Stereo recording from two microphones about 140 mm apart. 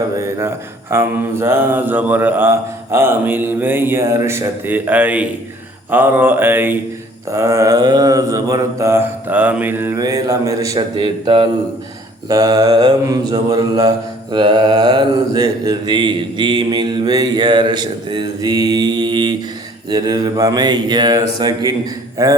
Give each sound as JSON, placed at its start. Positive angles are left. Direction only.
{"t": 0.2, "sound": "speech", "side_deg": -20}
{"t": 7.3, "sound": "mantra", "side_deg": -20}
{"t": 10.0, "sound": "mantra", "side_deg": -25}
{"t": 10.8, "sound": "mantra", "side_deg": -35}
{"t": 12.3, "sound": "mantra", "side_deg": -25}